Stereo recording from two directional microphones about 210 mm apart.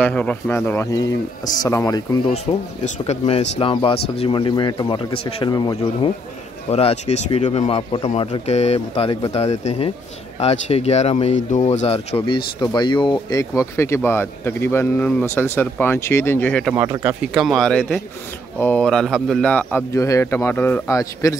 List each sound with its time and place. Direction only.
0.0 s speech: 5° left (ahead or behind)
2.3 s speech: 30° left (ahead or behind); by 16.7 s 5° left (ahead or behind)
16.7 s speech: 15° right (ahead or behind)
17.3 s speech: centre (ahead or behind); by 21.4 s 15° left (ahead or behind)